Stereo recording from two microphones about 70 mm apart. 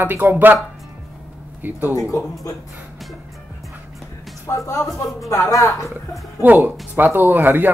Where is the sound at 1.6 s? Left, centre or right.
Right.